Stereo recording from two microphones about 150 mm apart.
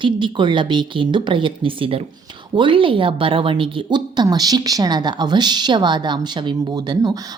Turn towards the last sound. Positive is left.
turn(degrees=-25)  # may be behind; listen again after turning